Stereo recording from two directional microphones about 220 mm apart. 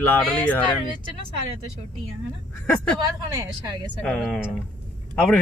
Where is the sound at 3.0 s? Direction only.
15° right (ahead or behind).